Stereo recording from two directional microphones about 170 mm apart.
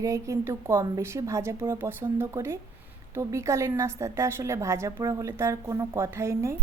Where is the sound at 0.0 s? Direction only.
15° right (ahead or behind).